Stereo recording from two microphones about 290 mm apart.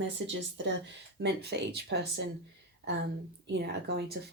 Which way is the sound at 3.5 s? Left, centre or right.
Right.